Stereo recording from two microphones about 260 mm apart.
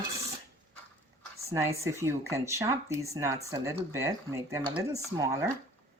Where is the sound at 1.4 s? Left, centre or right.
Centre.